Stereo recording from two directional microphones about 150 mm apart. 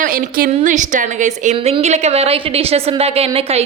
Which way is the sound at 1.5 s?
40° right (ahead or behind).